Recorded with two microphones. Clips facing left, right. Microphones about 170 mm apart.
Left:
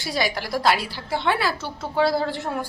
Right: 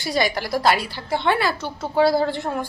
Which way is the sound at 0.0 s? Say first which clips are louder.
Right 3 dB; centre (ahead or behind).